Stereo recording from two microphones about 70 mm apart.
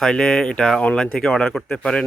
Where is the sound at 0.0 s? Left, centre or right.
Centre.